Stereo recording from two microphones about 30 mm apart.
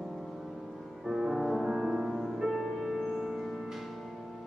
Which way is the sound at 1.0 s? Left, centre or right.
Centre.